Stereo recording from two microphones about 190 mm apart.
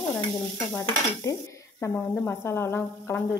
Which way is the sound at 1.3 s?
15° left (ahead or behind).